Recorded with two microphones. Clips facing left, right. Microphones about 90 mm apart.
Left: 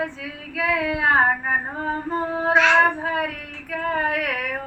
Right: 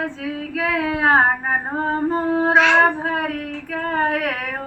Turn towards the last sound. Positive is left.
turn(degrees=-40)  # may be behind; listen again after turning